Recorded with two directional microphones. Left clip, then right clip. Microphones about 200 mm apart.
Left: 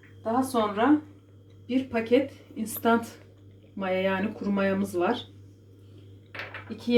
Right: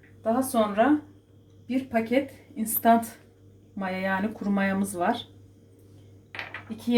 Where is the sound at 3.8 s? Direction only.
30° right (ahead or behind).